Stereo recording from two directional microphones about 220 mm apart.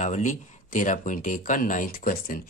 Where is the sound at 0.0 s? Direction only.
35° left (ahead or behind).